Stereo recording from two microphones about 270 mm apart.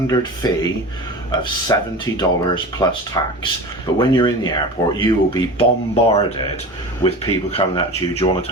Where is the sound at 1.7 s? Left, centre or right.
Centre.